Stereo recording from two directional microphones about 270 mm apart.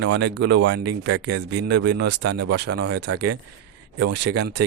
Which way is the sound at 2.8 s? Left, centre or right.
Right.